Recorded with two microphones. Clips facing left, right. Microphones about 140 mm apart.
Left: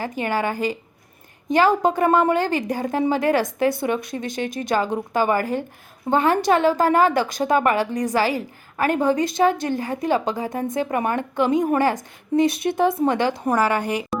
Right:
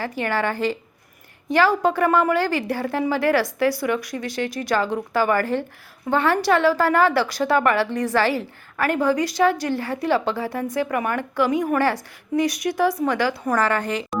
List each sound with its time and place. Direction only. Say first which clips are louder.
0.0 s a woman's voice: even; 15° left (ahead or behind)
13.6 s a woman's voice: left 1 dB; 10° left (ahead or behind)